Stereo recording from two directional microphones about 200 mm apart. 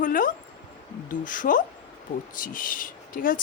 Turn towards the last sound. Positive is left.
turn(degrees=45)  # may be behind; listen again after turning